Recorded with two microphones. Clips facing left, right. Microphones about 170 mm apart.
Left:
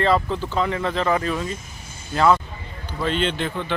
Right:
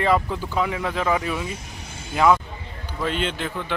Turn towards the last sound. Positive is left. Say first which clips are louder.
# left 3 dB
turn(degrees=-5)  # may be behind; listen again after turning